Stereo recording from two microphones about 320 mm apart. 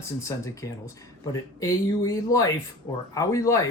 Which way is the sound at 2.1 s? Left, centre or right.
Centre.